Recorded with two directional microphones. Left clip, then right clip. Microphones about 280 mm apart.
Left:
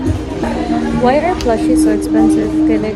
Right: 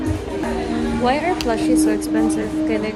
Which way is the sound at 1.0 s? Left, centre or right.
Centre.